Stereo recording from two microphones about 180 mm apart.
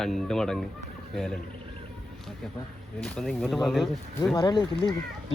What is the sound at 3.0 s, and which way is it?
Speech, 5° left (ahead or behind).